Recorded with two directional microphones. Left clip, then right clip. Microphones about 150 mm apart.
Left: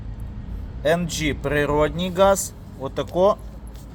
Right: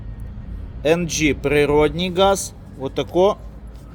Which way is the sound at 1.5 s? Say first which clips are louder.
Right 4 dB; 20° right (ahead or behind).